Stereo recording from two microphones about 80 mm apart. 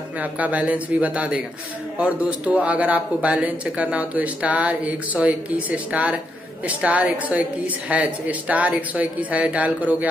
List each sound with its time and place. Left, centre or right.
0.2 s a woman's voice: centre